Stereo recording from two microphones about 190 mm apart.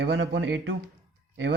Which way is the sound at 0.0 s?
65° right (ahead or behind).